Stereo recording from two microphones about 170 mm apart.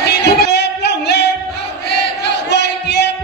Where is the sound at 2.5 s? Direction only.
85° left.